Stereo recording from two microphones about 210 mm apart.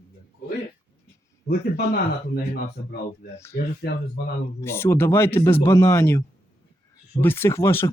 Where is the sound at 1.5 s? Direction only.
50° left (ahead or behind).